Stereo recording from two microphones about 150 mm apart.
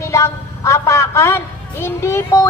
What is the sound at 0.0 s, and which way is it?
A man's voice, 20° left (ahead or behind).